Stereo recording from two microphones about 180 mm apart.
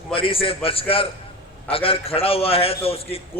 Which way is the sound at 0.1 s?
30° left (ahead or behind).